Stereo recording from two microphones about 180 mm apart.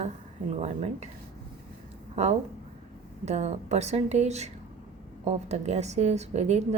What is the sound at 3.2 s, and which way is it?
Speech, 40° right (ahead or behind).